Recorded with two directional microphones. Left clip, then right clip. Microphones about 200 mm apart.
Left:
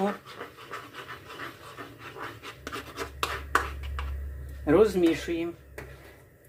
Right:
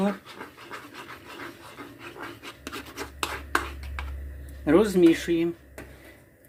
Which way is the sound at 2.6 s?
15° right (ahead or behind).